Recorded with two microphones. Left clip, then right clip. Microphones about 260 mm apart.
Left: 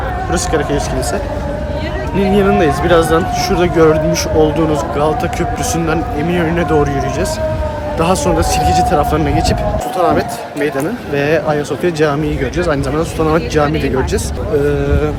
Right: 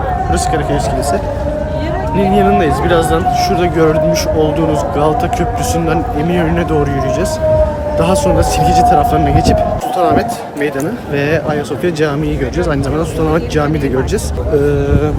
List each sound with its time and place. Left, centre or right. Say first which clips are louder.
2.3 s speech: even; centre
13.1 s speech: left 2 dB; centre